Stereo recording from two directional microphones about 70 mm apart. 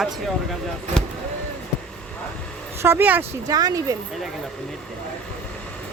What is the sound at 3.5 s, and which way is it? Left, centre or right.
Speech, right.